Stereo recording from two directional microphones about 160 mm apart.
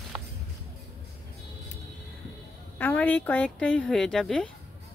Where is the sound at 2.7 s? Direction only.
10° left (ahead or behind).